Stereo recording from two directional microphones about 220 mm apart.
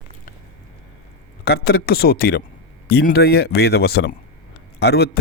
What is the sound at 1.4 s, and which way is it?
A man's voice, 45° left (ahead or behind).